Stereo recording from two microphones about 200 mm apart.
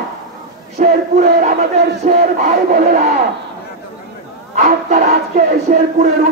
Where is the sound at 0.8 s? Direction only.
35° right (ahead or behind).